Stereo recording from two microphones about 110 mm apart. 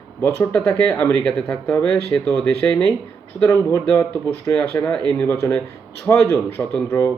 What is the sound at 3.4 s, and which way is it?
Speech, 30° left (ahead or behind).